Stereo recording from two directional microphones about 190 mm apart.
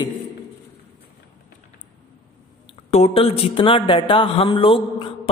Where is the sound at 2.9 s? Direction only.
35° left (ahead or behind).